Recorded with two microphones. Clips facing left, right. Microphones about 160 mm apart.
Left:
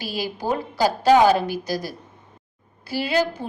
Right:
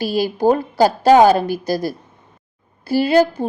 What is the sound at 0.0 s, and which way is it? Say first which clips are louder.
A woman's voice: right 11 dB; 55° right (ahead or behind).